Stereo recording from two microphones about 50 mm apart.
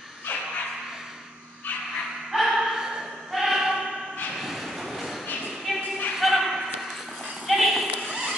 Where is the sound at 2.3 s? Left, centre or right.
Centre.